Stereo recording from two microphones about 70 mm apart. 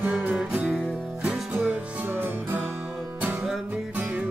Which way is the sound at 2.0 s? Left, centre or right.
Right.